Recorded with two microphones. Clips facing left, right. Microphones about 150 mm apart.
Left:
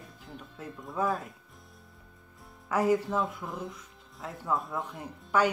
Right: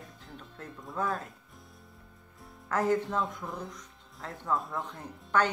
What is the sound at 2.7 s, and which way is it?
Speech, 10° left (ahead or behind).